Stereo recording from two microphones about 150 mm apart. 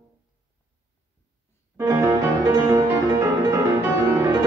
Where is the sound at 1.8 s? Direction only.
20° right (ahead or behind).